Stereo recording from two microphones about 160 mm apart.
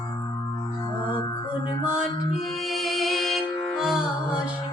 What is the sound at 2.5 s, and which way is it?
Music, centre (ahead or behind).